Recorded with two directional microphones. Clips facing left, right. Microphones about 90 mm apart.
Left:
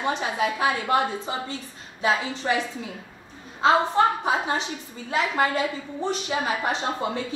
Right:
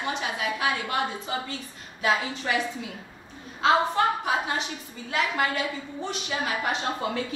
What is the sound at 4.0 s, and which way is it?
A woman's voice, 30° left (ahead or behind).